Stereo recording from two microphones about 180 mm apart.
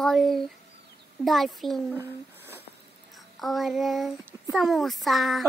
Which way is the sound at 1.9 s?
10° right (ahead or behind).